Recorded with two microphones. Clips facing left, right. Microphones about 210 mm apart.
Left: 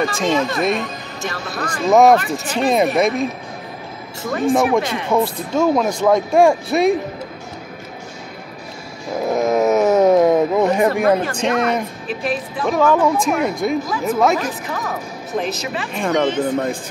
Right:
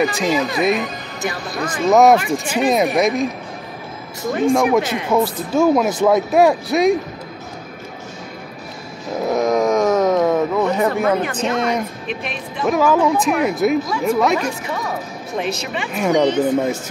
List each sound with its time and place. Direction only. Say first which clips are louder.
0.0 s speech: even; centre (ahead or behind)
4.5 s speech: even; centre (ahead or behind)
9.4 s a sound: left 1 dB; 5° left (ahead or behind)
10.2 s speech: left 2 dB; 15° left (ahead or behind)
11.1 s speech: left 2 dB; 35° left (ahead or behind)
12.3 s speech: even; centre (ahead or behind)